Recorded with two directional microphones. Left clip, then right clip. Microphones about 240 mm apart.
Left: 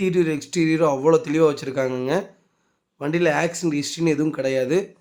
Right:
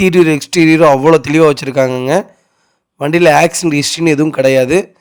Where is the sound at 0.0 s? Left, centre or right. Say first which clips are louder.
Right 12 dB; right.